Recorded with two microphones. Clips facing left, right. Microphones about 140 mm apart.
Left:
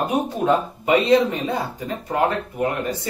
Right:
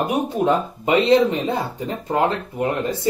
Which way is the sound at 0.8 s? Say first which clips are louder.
Right 2 dB; 25° right (ahead or behind).